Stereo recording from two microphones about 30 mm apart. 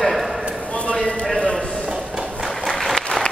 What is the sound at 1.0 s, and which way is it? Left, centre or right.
Clip-clop, left.